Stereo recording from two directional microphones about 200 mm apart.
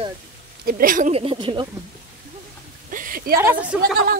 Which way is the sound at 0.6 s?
45° right (ahead or behind).